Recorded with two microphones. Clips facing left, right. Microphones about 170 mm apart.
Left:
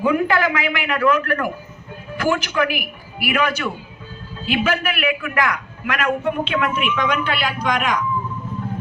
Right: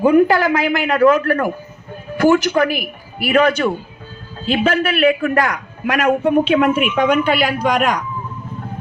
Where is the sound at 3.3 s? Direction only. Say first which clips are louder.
Right 7 dB; 30° right (ahead or behind).